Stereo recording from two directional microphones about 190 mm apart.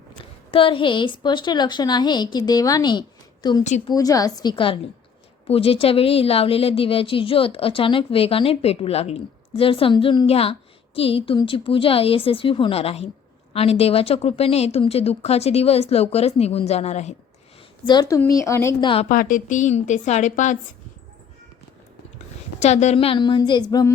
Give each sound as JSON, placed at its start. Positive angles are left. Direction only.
{"t": 0.5, "sound": "a woman's voice", "side_deg": 25}
{"t": 17.8, "sound": "a woman's voice", "side_deg": 20}
{"t": 19.0, "sound": "speech", "side_deg": 45}
{"t": 22.6, "sound": "a woman's voice", "side_deg": 35}